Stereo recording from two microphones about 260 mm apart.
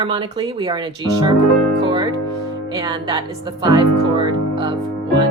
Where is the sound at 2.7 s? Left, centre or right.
Centre.